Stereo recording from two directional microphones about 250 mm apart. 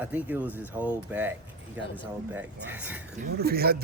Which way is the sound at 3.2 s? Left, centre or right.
Right.